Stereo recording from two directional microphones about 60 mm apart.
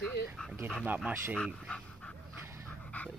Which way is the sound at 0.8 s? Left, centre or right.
Right.